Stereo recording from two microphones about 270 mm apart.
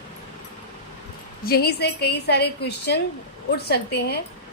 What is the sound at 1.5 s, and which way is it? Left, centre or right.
A woman's voice, left.